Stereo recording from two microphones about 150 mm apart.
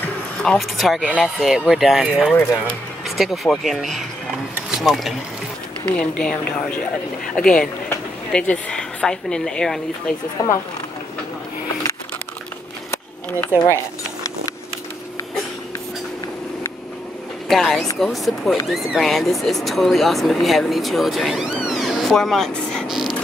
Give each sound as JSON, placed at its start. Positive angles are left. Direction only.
{"t": 0.4, "sound": "speech", "side_deg": 0}
{"t": 7.3, "sound": "speech", "side_deg": 5}
{"t": 10.4, "sound": "speech", "side_deg": 20}
{"t": 13.5, "sound": "speech", "side_deg": 10}
{"t": 17.5, "sound": "speech", "side_deg": 5}